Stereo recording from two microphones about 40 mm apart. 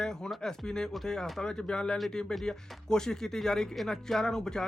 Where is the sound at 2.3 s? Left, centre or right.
Centre.